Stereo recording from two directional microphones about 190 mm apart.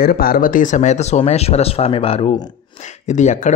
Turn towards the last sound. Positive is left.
turn(degrees=40)  # may be behind; listen again after turning